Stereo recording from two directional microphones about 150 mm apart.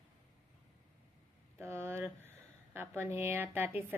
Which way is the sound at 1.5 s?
15° right (ahead or behind).